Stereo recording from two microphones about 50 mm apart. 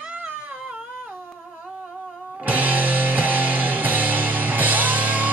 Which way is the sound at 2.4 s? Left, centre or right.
Right.